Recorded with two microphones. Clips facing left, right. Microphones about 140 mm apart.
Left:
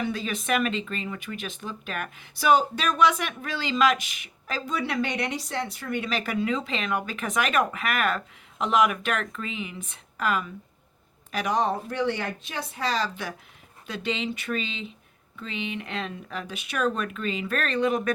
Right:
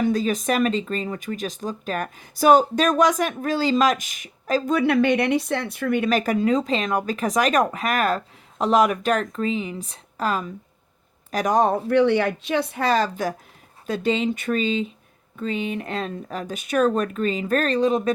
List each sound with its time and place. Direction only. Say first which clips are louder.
0.0 s speech: right 8 dB; 40° right (ahead or behind)